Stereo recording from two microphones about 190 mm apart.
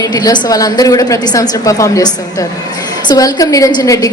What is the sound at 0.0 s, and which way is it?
A woman's voice, 20° left (ahead or behind).